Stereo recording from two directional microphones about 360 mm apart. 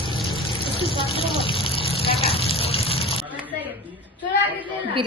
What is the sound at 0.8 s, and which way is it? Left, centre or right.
Water, centre.